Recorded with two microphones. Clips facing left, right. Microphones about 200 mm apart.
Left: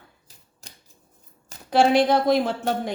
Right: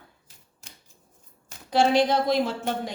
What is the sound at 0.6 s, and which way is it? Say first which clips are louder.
Scissors: left 2 dB; 40° left (ahead or behind).